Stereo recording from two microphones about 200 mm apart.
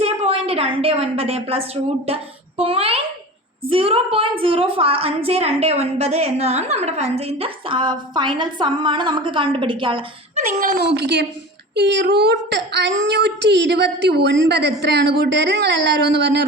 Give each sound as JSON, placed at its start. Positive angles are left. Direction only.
{"t": 0.0, "sound": "a woman's voice", "side_deg": -30}
{"t": 10.6, "sound": "speech", "side_deg": -50}